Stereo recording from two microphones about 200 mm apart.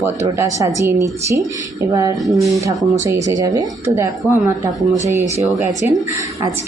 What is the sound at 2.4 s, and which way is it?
Speech, 15° right (ahead or behind).